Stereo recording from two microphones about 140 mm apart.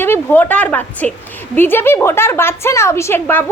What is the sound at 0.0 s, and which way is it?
A woman's voice, 15° left (ahead or behind).